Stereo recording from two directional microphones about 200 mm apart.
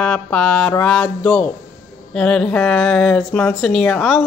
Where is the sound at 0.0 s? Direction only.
5° left (ahead or behind).